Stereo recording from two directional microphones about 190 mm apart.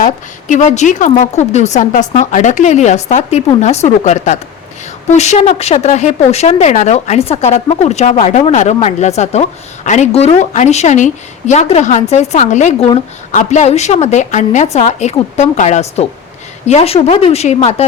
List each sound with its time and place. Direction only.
0.0 s a woman's voice: 40° left (ahead or behind)